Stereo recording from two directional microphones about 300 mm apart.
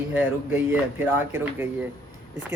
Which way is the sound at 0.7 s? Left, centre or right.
Centre.